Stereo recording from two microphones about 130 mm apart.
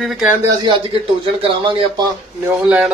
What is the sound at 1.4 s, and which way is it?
Speech, 45° right (ahead or behind).